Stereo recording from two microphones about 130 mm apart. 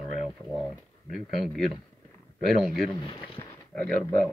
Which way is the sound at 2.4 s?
Centre (ahead or behind).